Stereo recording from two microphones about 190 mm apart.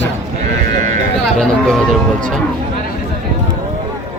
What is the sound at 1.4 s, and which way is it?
Speech, centre (ahead or behind).